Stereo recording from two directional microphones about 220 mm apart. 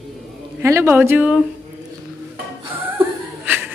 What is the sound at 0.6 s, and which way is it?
Speech, 10° right (ahead or behind).